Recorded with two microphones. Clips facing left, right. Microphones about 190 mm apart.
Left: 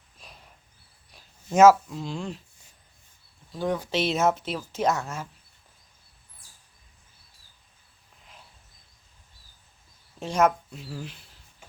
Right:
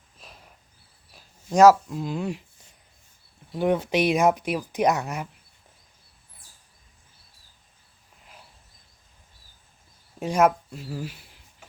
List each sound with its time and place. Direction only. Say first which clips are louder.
0.2 s a sound: right 1 dB; centre (ahead or behind)
1.1 s speech: right 1 dB; centre (ahead or behind)
3.5 s speech: right 5 dB; 20° right (ahead or behind)
10.2 s speech: right 2 dB; 10° right (ahead or behind)